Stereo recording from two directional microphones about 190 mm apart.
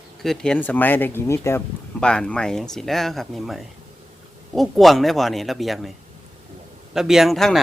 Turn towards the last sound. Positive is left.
turn(degrees=0)  # may be behind; listen again after turning